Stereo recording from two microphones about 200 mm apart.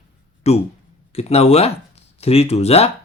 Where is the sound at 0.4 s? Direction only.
30° left (ahead or behind).